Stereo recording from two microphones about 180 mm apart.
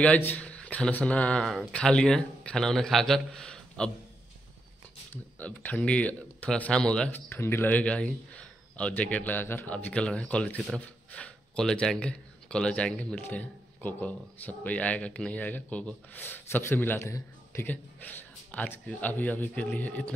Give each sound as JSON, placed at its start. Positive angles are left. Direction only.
{"t": 0.0, "sound": "speech", "side_deg": 10}
{"t": 5.1, "sound": "speech", "side_deg": 10}